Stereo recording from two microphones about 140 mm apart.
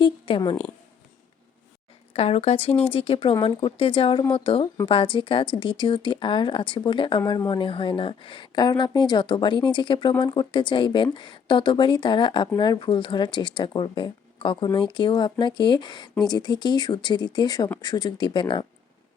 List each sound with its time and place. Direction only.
0.0 s speech: 35° left (ahead or behind)
2.1 s speech: 50° left (ahead or behind)